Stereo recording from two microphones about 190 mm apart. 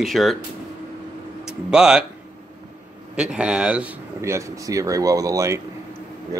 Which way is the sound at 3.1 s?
5° right (ahead or behind).